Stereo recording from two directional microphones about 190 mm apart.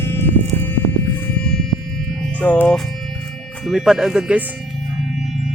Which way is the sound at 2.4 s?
5° left (ahead or behind).